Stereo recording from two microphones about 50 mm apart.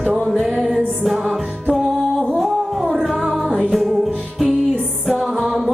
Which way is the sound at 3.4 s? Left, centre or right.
Centre.